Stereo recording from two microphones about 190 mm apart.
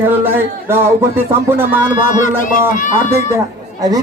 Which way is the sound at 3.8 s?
20° right (ahead or behind).